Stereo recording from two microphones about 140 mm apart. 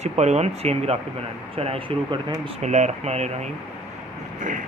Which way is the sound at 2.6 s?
55° right (ahead or behind).